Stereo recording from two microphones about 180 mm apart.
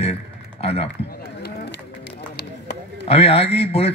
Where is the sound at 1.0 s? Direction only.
60° left (ahead or behind).